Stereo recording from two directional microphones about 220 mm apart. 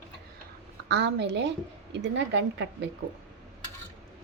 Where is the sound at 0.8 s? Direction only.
50° right (ahead or behind).